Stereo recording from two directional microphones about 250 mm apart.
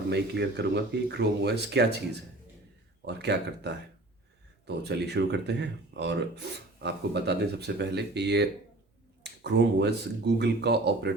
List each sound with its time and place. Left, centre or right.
0.1 s speech: right
3.1 s speech: right